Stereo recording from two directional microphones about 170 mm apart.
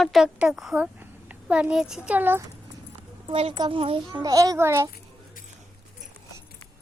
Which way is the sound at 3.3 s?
30° right (ahead or behind).